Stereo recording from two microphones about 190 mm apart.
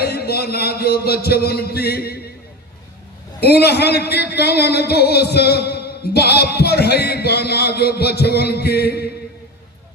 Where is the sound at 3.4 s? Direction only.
60° left (ahead or behind).